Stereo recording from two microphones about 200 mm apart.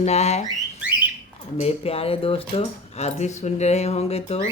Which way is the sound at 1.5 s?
30° left (ahead or behind).